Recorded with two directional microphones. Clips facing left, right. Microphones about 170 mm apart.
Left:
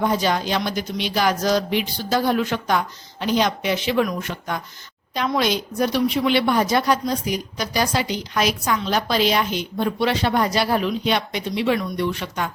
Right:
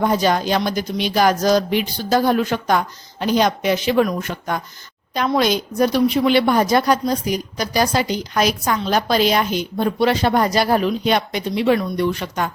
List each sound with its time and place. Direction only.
0.0 s a woman's voice: 45° right (ahead or behind)